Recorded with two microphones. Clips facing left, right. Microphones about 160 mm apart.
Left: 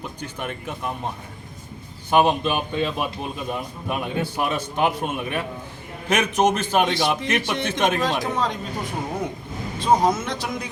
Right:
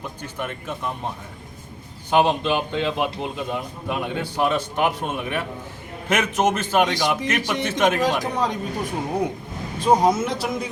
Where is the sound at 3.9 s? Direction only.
15° left (ahead or behind).